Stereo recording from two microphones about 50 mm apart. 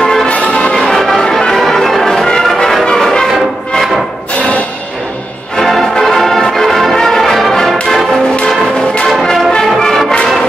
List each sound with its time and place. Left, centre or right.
0.0 s music: centre
0.3 s music: left
0.7 s music: centre
2.4 s brass instrument: centre
5.6 s brass instrument: centre
9.0 s brass instrument: centre
9.8 s music: centre